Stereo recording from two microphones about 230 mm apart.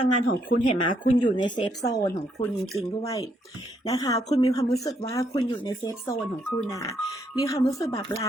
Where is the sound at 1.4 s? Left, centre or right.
Centre.